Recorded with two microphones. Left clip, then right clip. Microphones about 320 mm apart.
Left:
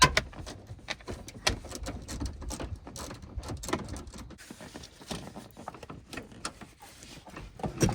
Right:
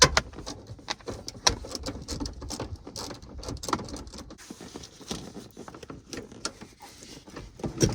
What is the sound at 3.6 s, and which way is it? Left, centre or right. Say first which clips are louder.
Vehicle: right 4 dB; centre.